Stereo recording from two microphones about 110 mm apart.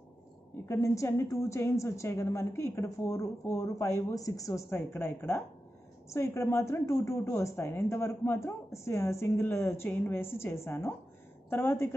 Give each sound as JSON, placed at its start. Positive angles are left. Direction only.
{"t": 0.7, "sound": "a man's voice", "side_deg": 25}